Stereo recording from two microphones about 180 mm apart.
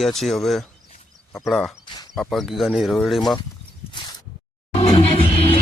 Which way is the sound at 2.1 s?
Centre (ahead or behind).